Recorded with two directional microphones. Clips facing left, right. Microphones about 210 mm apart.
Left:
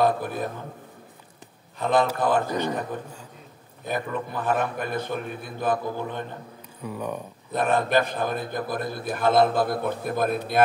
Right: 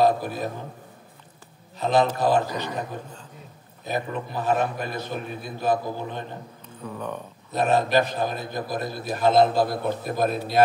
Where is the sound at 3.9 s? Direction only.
55° left (ahead or behind).